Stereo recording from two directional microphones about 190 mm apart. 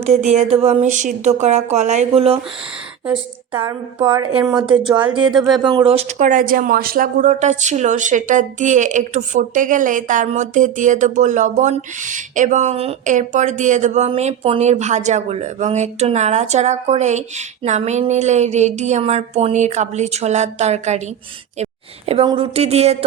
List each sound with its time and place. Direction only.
0.0 s speech: 35° right (ahead or behind)
3.7 s a woman's voice: 25° right (ahead or behind)
4.7 s speech: 5° right (ahead or behind)
5.6 s speech: 25° right (ahead or behind)